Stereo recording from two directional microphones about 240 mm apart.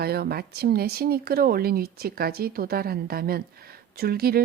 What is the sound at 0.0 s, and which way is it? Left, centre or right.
Speech, right.